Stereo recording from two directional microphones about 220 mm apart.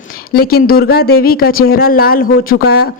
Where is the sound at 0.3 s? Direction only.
45° left (ahead or behind).